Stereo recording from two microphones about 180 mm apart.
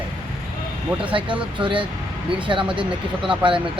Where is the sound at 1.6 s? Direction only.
25° right (ahead or behind).